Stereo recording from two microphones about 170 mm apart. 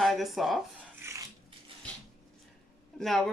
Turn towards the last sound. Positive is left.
turn(degrees=0)  # may be behind; listen again after turning